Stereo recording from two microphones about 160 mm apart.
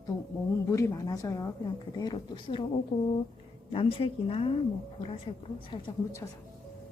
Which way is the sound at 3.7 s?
35° left (ahead or behind).